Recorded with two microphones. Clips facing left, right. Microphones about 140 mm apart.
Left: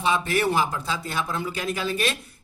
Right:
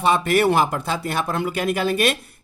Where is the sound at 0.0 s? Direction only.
60° right (ahead or behind).